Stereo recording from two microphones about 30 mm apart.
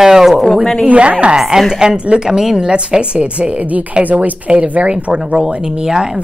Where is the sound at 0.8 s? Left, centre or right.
Right.